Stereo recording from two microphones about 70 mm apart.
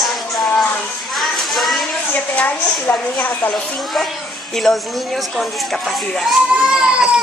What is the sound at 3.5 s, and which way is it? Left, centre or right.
A woman's voice, centre.